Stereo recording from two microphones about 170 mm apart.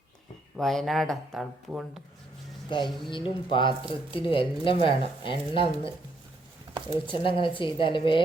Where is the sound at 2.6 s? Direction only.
30° left (ahead or behind).